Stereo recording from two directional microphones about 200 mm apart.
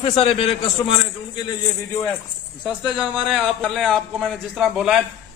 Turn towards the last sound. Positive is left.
turn(degrees=0)  # may be behind; listen again after turning